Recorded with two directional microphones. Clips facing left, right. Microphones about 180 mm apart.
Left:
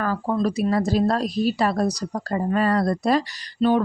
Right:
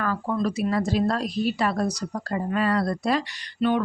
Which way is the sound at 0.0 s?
35° left (ahead or behind).